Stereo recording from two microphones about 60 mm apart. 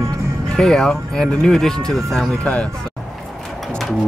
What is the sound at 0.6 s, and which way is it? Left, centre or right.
Speech, centre.